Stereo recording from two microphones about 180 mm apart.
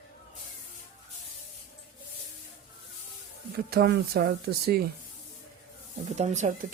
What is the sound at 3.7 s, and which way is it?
Speech, 60° right (ahead or behind).